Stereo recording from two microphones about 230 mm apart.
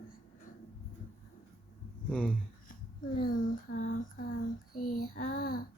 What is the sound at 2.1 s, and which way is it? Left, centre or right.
Speech, centre.